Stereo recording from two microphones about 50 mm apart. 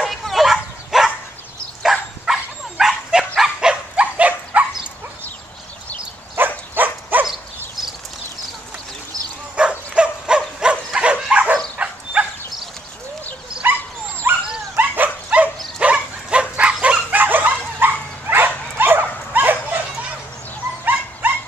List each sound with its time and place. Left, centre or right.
0.0 s bow-wow: centre
1.8 s dog: centre
3.9 s dog: right
6.3 s dog: right
7.2 s dog: centre
9.6 s dog: right
13.6 s dog: right
14.8 s dog: right
21.2 s dog: right